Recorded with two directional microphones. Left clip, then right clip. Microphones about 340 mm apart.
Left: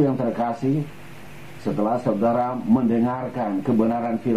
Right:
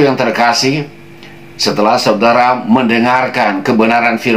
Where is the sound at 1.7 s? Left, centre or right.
Centre.